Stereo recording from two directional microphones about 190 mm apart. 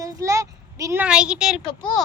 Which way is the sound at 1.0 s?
5° right (ahead or behind).